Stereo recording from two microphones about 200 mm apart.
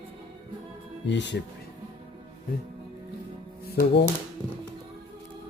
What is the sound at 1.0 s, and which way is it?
Speech, 60° left (ahead or behind).